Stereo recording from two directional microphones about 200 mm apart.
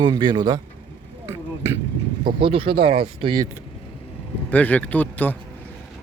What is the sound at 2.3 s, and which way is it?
Speech, 25° right (ahead or behind).